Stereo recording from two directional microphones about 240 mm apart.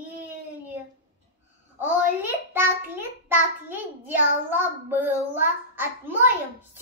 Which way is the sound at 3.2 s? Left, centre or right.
Centre.